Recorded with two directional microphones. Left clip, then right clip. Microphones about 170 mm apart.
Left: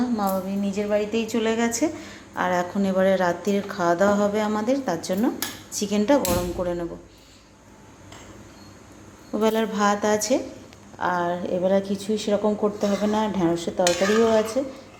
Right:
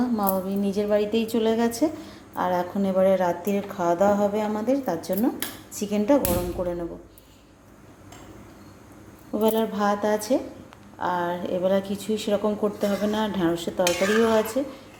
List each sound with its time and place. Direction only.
0.0 s a woman's voice: 25° right (ahead or behind); by 6.8 s centre (ahead or behind)
9.3 s speech: 10° right (ahead or behind)